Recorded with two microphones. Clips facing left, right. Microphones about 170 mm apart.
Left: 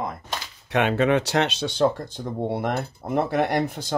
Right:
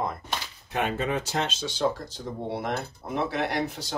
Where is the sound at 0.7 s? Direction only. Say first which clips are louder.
Left 7 dB; 75° left (ahead or behind).